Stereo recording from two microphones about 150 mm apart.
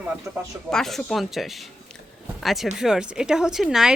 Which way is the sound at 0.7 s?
5° left (ahead or behind).